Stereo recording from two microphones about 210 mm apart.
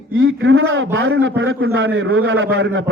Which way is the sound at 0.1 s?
65° right (ahead or behind).